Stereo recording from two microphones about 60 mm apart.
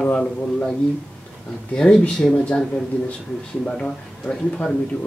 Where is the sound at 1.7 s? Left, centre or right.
Centre.